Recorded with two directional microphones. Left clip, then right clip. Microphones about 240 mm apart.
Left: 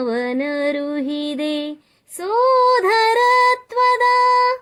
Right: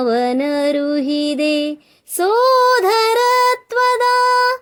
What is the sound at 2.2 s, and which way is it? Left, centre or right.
Female singing, right.